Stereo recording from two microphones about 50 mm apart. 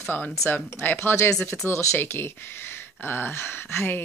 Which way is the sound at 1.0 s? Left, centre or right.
Left.